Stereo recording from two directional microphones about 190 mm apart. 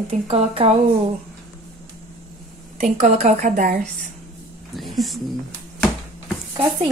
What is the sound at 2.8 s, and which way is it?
A woman's voice, 40° right (ahead or behind).